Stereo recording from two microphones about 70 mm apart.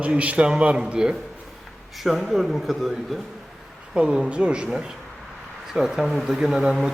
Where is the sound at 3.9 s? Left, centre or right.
Centre.